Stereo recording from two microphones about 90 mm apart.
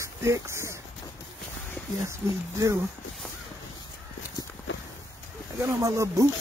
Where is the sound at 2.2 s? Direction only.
35° right (ahead or behind).